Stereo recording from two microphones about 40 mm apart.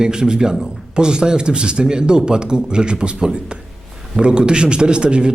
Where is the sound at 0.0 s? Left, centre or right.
Centre.